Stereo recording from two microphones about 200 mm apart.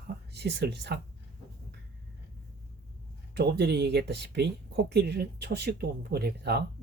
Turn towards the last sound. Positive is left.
turn(degrees=-55)  # may be behind; listen again after turning